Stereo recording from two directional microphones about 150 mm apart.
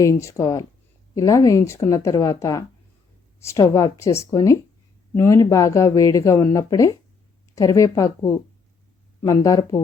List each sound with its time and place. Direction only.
0.0 s speech: 20° left (ahead or behind)